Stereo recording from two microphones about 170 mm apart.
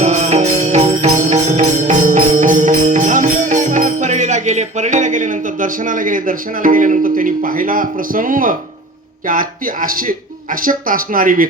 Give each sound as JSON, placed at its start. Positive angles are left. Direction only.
{"t": 0.0, "sound": "music", "side_deg": -45}
{"t": 9.2, "sound": "speech", "side_deg": -55}